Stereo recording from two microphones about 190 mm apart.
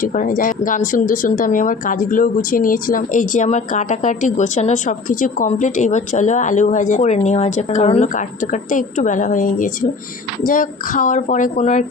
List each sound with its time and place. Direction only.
0.0 s speech: 45° left (ahead or behind)